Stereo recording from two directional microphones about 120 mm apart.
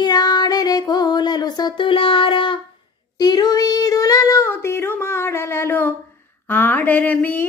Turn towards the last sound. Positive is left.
turn(degrees=15)  # may be behind; listen again after turning